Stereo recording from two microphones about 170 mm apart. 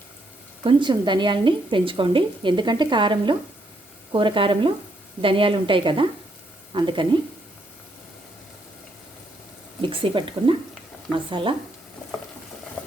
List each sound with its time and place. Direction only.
0.6 s speech: 30° right (ahead or behind)
9.8 s speech: 30° right (ahead or behind)